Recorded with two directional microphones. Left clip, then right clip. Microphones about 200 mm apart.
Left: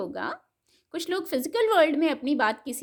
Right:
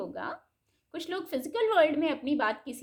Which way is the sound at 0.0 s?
40° left (ahead or behind).